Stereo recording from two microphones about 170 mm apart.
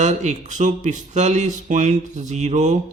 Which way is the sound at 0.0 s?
40° right (ahead or behind).